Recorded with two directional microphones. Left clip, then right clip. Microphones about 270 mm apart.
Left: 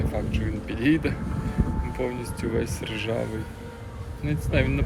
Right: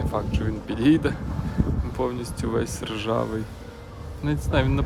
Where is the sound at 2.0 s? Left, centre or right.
Centre.